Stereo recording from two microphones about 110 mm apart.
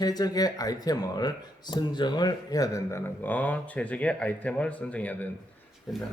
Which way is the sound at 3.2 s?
15° left (ahead or behind).